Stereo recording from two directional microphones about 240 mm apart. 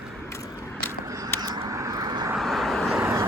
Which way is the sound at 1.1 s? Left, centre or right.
Centre.